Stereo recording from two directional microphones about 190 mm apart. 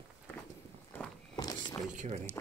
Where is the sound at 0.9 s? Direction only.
10° left (ahead or behind).